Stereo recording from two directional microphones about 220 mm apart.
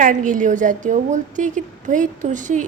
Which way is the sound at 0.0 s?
35° right (ahead or behind).